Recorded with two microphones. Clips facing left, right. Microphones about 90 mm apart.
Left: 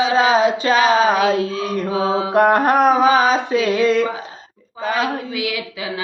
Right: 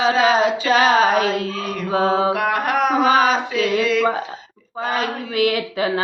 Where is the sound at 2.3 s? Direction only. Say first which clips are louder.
Left 6 dB; 35° left (ahead or behind).